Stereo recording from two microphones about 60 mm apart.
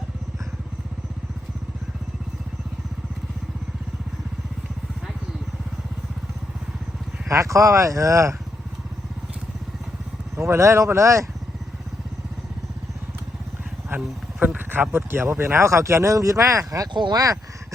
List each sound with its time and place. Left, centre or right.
7.3 s speech: right
10.3 s speech: right
14.4 s speech: right